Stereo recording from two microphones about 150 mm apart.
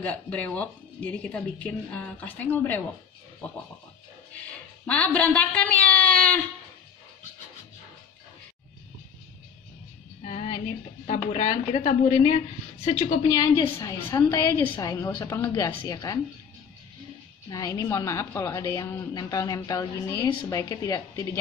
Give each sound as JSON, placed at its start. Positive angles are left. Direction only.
{"t": 0.0, "sound": "a woman's voice", "side_deg": 10}
{"t": 4.8, "sound": "a woman's voice", "side_deg": 10}
{"t": 10.2, "sound": "a sound", "side_deg": 40}
{"t": 11.3, "sound": "a woman's voice", "side_deg": 50}
{"t": 13.3, "sound": "a woman's voice", "side_deg": 25}
{"t": 17.5, "sound": "a woman's voice", "side_deg": 25}